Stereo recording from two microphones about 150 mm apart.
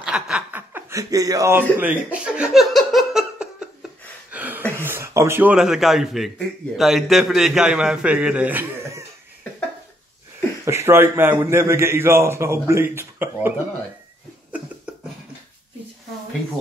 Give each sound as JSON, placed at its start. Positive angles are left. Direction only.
{"t": 0.0, "sound": "chuckle", "side_deg": -5}
{"t": 4.3, "sound": "a sound", "side_deg": -10}
{"t": 4.7, "sound": "a man's voice", "side_deg": -15}
{"t": 10.6, "sound": "a man's voice", "side_deg": -15}